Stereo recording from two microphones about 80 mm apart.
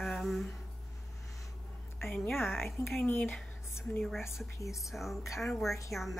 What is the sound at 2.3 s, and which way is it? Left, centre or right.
Speech, centre.